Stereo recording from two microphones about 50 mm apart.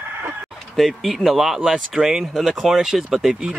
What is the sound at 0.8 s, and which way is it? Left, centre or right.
Speech, centre.